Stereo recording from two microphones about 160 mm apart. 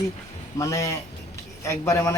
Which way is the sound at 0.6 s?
20° left (ahead or behind).